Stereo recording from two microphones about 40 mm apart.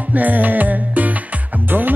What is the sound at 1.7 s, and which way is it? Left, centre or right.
Speech, right.